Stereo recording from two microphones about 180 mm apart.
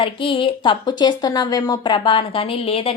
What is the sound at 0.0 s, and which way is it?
Speech, 30° left (ahead or behind).